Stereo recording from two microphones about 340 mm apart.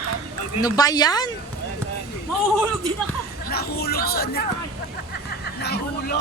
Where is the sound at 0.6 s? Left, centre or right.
Centre.